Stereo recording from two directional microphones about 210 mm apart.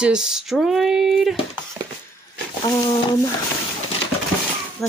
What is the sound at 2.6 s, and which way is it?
Speech, 20° left (ahead or behind).